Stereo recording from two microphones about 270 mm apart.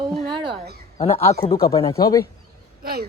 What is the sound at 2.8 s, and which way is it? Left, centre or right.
Speech, right.